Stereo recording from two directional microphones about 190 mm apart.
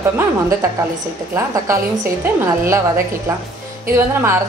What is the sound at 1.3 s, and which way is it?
A woman's voice, 15° right (ahead or behind).